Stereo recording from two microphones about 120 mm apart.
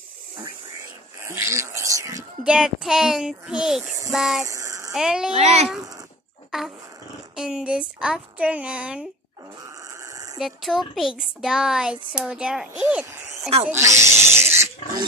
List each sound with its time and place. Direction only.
1.2 s a sound: 20° right (ahead or behind)
2.4 s speech: 5° right (ahead or behind)
4.5 s a sound: 25° right (ahead or behind)
4.9 s speech: 5° right (ahead or behind)
5.3 s speech: 60° right (ahead or behind)
5.8 s speech: 30° right (ahead or behind)
7.3 s a woman's voice: 5° right (ahead or behind)
9.6 s a sound: 25° right (ahead or behind)
10.4 s a woman's voice: centre (ahead or behind)
13.7 s speech: 25° right (ahead or behind)
14.2 s pig: 60° right (ahead or behind)